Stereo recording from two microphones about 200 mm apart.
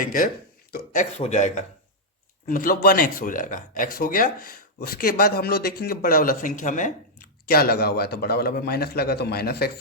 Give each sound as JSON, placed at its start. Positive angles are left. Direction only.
{"t": 0.0, "sound": "speech", "side_deg": 40}